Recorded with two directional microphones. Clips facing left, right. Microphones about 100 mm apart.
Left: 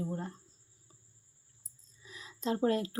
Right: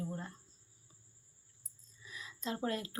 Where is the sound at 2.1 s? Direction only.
30° left (ahead or behind).